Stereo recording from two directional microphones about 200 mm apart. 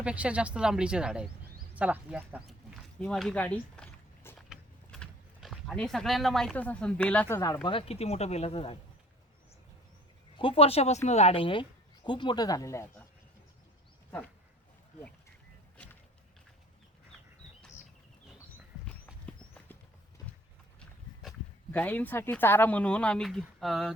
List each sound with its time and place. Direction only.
0.0 s speech: 5° right (ahead or behind)
1.7 s a sound: 5° right (ahead or behind); by 4.4 s 10° left (ahead or behind)
4.4 s speech: centre (ahead or behind); by 8.8 s 30° left (ahead or behind)
10.3 s speech: 25° left (ahead or behind)
18.9 s horse: 5° left (ahead or behind)
20.7 s speech: centre (ahead or behind)